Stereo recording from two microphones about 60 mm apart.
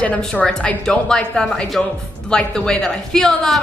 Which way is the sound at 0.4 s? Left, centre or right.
Centre.